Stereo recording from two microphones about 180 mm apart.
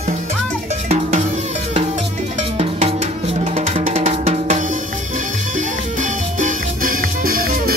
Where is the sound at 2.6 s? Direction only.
35° right (ahead or behind).